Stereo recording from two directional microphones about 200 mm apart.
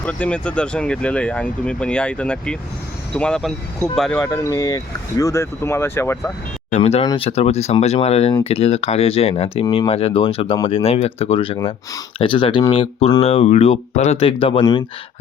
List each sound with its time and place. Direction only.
0.0 s speech: 5° left (ahead or behind)
4.2 s speech: 15° left (ahead or behind)
6.7 s speech: 35° left (ahead or behind)